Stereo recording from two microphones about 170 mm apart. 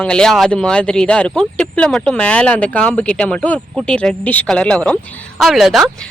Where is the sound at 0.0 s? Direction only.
5° left (ahead or behind).